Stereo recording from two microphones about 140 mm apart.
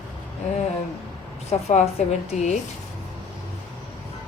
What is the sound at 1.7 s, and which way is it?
Speech, 55° left (ahead or behind).